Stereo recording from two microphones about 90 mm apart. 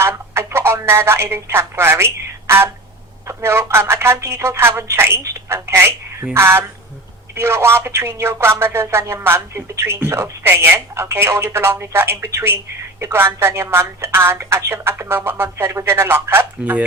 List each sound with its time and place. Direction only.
0.0 s speech: 30° right (ahead or behind)